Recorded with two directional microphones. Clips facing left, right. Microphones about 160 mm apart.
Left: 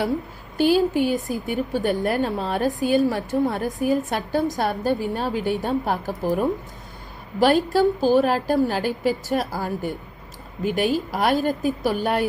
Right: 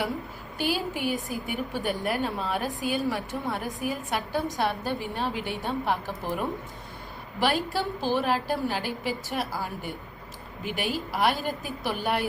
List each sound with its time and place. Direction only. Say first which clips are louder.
0.5 s a woman's voice: left 11 dB; 45° left (ahead or behind)